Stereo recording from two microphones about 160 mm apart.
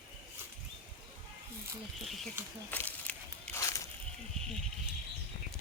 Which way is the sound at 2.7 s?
10° left (ahead or behind).